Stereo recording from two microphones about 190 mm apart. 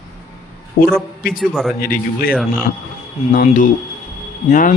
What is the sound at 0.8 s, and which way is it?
Speech, 50° left (ahead or behind).